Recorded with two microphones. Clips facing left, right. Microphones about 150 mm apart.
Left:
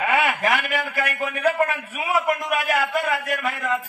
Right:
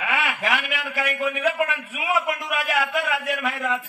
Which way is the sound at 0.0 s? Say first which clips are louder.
Left 5 dB; 45° left (ahead or behind).